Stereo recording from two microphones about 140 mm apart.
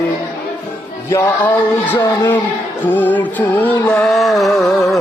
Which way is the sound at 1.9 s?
15° left (ahead or behind).